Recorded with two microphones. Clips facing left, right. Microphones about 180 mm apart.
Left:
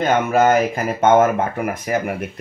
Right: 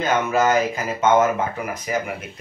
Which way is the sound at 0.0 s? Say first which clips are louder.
Left 4 dB; 55° left (ahead or behind).